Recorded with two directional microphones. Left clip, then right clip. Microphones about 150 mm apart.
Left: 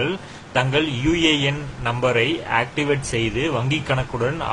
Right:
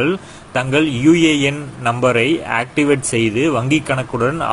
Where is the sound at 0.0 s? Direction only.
35° right (ahead or behind).